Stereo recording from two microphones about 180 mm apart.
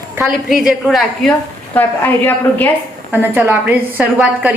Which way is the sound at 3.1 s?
10° right (ahead or behind).